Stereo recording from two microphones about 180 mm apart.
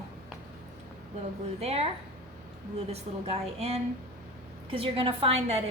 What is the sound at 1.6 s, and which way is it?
Speech, 35° right (ahead or behind).